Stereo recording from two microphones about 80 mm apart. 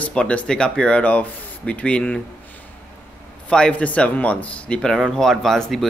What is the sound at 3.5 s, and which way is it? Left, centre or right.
Speech, centre.